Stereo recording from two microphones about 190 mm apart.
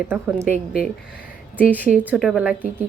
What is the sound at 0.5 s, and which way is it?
Speech, 35° right (ahead or behind).